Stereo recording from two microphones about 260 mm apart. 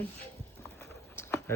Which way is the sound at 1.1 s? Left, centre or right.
Centre.